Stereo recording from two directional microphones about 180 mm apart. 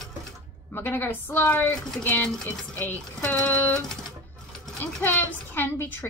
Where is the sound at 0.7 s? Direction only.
10° left (ahead or behind).